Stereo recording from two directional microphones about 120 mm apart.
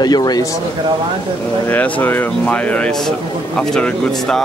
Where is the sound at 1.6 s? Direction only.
15° left (ahead or behind).